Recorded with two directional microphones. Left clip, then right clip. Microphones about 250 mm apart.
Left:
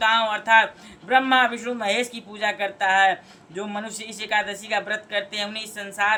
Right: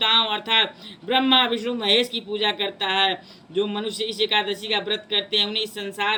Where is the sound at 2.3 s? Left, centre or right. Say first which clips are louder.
Left 1 dB; left.